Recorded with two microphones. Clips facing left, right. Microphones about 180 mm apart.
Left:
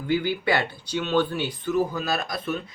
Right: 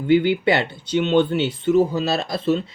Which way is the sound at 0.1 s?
25° right (ahead or behind).